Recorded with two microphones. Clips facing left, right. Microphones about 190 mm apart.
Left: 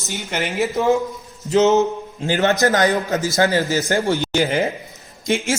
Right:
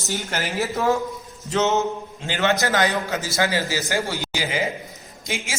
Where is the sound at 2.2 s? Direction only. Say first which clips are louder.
Left 5 dB; 40° left (ahead or behind).